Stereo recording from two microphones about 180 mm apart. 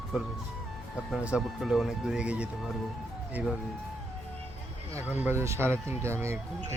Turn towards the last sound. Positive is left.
turn(degrees=-15)  # may be behind; listen again after turning